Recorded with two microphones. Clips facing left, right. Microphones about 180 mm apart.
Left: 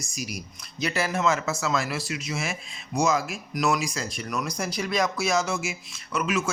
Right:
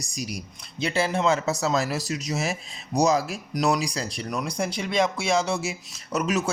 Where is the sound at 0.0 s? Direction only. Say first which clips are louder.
Right 2 dB; 35° right (ahead or behind).